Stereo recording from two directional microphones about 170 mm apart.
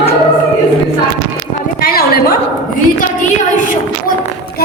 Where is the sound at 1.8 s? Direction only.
60° left (ahead or behind).